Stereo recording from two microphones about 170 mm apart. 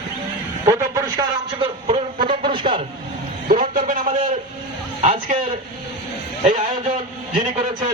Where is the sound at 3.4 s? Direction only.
50° right (ahead or behind).